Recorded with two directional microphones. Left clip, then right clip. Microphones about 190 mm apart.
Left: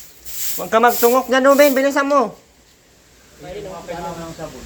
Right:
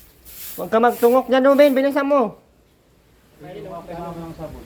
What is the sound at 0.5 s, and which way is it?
Speech, 25° right (ahead or behind).